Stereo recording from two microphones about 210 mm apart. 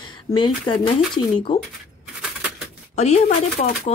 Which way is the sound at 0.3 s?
20° left (ahead or behind).